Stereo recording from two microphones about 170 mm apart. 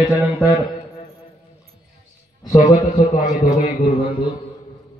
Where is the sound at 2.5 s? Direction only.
45° left (ahead or behind).